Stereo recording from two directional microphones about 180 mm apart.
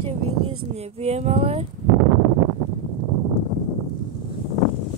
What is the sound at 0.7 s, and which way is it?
Speech, 35° right (ahead or behind).